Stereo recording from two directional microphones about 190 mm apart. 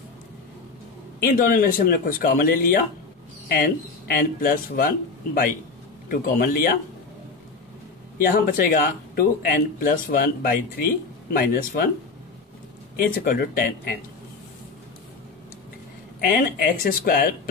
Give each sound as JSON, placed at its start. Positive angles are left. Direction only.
{"t": 1.2, "sound": "speech", "side_deg": 50}
{"t": 8.2, "sound": "speech", "side_deg": 45}
{"t": 13.1, "sound": "speech", "side_deg": 50}
{"t": 16.3, "sound": "speech", "side_deg": 50}